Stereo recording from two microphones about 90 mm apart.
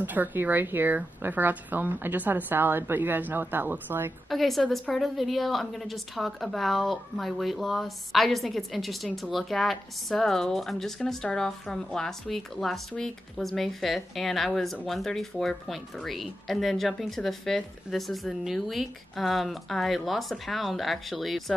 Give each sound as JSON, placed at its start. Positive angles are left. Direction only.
{"t": 0.0, "sound": "a woman's voice", "side_deg": -20}
{"t": 4.3, "sound": "speech", "side_deg": 0}